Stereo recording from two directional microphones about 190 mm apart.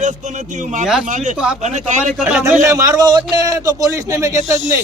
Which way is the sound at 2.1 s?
5° right (ahead or behind).